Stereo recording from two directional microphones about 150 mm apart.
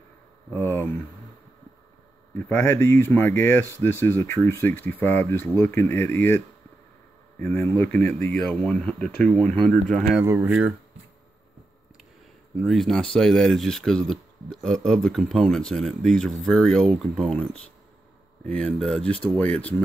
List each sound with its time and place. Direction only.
0.5 s a sound: 15° left (ahead or behind)
2.3 s speech: 15° left (ahead or behind)
10.2 s speech: 20° right (ahead or behind)
12.6 s speech: centre (ahead or behind)